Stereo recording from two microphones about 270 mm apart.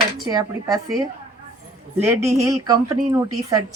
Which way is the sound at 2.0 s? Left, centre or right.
Centre.